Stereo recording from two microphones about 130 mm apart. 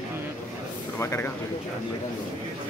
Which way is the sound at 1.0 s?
20° left (ahead or behind).